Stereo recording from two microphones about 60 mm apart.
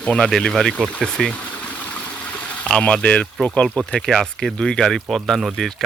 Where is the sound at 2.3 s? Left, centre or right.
Left.